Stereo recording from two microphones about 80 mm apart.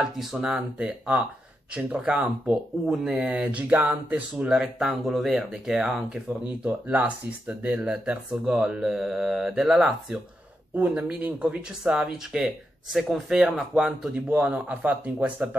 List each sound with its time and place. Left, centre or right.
0.0 s speech: centre
0.5 s speech: centre
2.9 s speech: centre
4.6 s speech: centre
10.8 s speech: centre
12.3 s speech: centre
14.3 s speech: right